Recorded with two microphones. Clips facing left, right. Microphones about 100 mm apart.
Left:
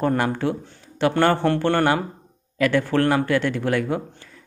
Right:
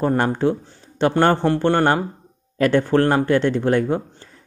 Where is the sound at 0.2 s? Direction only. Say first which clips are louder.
Right 4 dB; 25° right (ahead or behind).